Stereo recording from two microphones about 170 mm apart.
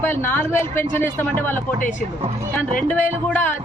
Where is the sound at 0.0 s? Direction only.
15° left (ahead or behind).